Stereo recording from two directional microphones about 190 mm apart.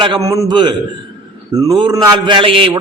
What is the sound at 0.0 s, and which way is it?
A man's voice, 20° right (ahead or behind).